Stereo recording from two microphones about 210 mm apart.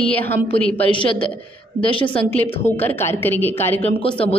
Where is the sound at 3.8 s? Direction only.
30° left (ahead or behind).